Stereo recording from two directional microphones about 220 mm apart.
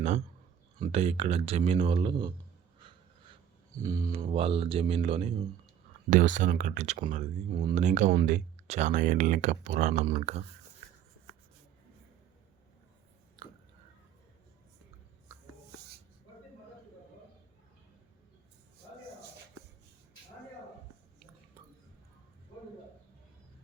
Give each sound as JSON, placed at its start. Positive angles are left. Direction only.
{"t": 0.8, "sound": "speech", "side_deg": -30}
{"t": 3.8, "sound": "speech", "side_deg": -15}
{"t": 7.5, "sound": "speech", "side_deg": -20}
{"t": 7.9, "sound": "speech", "side_deg": -35}
{"t": 13.4, "sound": "chewing", "side_deg": -15}